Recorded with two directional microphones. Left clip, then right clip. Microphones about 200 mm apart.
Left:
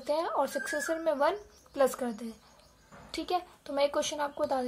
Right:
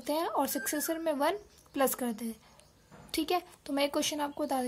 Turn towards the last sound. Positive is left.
turn(degrees=-30)  # may be behind; listen again after turning